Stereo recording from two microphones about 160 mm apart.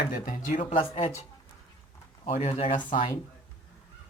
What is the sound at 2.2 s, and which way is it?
Speech, 40° left (ahead or behind).